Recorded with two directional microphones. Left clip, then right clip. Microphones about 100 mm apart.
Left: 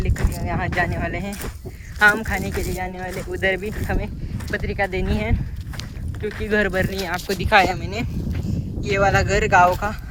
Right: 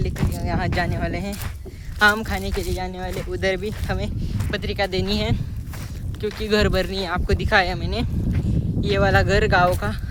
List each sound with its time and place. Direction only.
0.0 s a sound: 40° right (ahead or behind)
0.7 s a woman's voice: 35° right (ahead or behind)
2.8 s speech: 50° right (ahead or behind)
3.1 s speech: 30° right (ahead or behind)
6.4 s speech: 55° right (ahead or behind)
7.3 s speech: 10° right (ahead or behind)
7.7 s speech: centre (ahead or behind)